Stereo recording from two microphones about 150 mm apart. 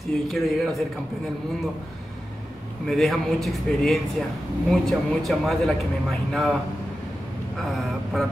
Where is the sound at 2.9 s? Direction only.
Centre (ahead or behind).